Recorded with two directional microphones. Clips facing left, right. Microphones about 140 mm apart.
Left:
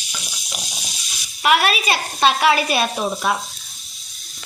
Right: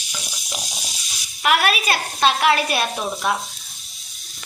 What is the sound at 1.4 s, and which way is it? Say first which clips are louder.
Speech: left 2 dB; centre (ahead or behind).